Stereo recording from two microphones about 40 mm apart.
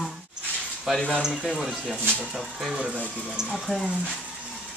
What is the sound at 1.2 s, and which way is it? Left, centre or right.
Speech, centre.